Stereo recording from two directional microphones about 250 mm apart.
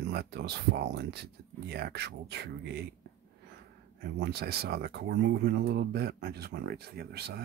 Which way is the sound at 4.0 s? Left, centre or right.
Right.